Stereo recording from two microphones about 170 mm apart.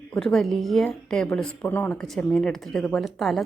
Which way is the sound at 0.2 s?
Centre (ahead or behind).